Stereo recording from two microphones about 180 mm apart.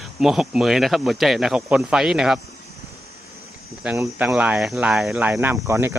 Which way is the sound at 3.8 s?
5° right (ahead or behind).